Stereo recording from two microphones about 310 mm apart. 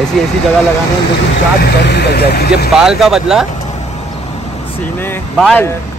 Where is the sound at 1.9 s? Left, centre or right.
Left.